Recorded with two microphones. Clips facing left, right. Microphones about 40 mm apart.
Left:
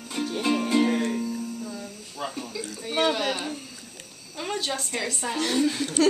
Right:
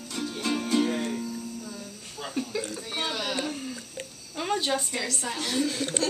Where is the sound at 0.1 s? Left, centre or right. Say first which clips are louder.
Left 4 dB; left.